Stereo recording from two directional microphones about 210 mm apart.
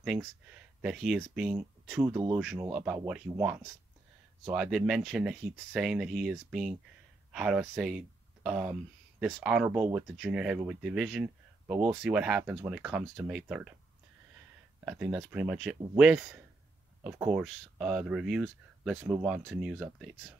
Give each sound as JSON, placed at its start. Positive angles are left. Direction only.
{"t": 0.0, "sound": "speech", "side_deg": 0}
{"t": 2.0, "sound": "speech", "side_deg": -15}
{"t": 2.3, "sound": "speech", "side_deg": -5}
{"t": 14.9, "sound": "speech", "side_deg": -5}